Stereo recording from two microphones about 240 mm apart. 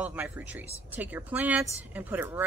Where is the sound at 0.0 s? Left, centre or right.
Centre.